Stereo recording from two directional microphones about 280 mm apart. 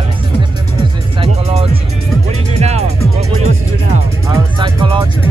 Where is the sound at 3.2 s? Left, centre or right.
Right.